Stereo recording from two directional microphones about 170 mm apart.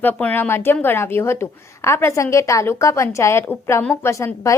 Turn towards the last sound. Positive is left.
turn(degrees=15)  # may be behind; listen again after turning